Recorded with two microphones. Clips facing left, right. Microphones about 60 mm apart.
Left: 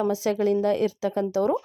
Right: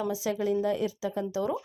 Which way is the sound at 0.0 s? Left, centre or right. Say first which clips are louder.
Left 6 dB; left.